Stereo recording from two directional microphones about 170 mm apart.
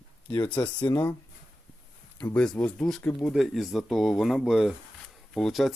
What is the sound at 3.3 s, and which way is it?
Speech, centre (ahead or behind).